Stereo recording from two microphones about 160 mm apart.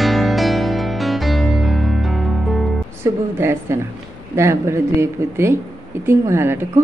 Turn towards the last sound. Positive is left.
turn(degrees=-15)  # may be behind; listen again after turning